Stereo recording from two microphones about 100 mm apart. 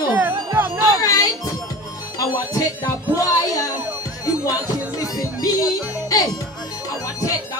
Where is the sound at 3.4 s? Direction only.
35° left (ahead or behind).